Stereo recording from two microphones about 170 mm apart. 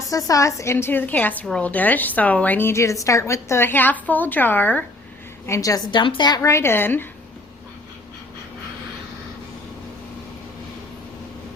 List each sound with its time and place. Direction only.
0.1 s a woman's voice: 20° left (ahead or behind)